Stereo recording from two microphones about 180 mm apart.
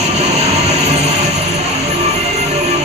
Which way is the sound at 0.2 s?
35° right (ahead or behind).